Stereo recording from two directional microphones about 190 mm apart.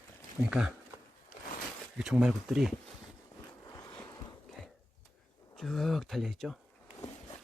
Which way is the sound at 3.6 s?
20° left (ahead or behind).